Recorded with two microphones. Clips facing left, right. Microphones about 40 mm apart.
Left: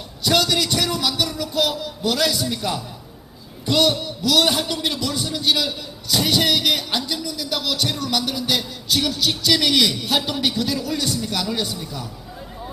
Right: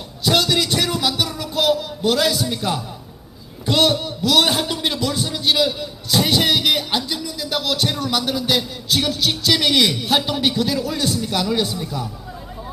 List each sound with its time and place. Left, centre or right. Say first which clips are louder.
0.3 s music: right 1 dB; centre
3.8 s a man's voice: right 2 dB; centre